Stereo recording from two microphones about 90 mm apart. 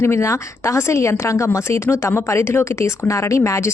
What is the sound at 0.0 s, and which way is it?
A woman's voice, 30° left (ahead or behind).